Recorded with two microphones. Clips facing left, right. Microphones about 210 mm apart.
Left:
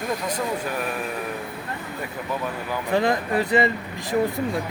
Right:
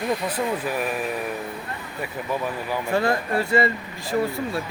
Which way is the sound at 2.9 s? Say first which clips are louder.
Left 2 dB; 15° left (ahead or behind).